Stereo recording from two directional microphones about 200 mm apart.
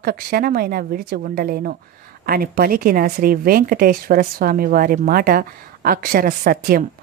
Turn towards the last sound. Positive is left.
turn(degrees=-45)  # may be behind; listen again after turning